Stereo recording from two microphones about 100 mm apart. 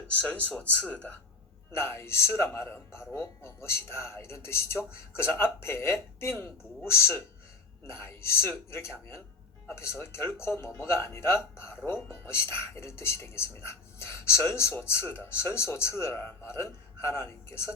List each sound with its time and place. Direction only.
0.1 s speech: 15° left (ahead or behind)
1.7 s speech: 25° left (ahead or behind)